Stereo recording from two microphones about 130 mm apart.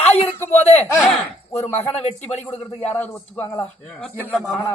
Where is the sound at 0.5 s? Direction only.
55° left (ahead or behind).